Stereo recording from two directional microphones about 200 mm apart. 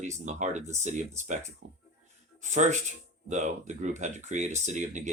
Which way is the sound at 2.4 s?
35° right (ahead or behind).